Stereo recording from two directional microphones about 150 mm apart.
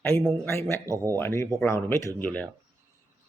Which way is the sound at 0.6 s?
20° right (ahead or behind).